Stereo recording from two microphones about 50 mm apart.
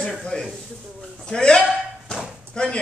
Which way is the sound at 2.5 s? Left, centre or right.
Centre.